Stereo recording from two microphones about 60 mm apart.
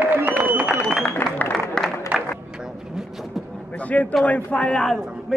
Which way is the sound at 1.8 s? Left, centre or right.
Centre.